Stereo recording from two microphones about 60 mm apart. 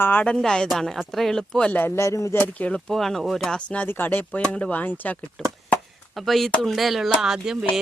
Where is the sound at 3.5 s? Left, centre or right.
Left.